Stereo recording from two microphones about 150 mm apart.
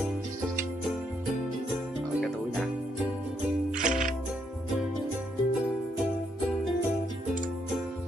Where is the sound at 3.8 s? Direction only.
60° right (ahead or behind).